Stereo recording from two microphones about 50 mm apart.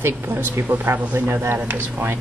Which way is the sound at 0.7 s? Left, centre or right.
Right.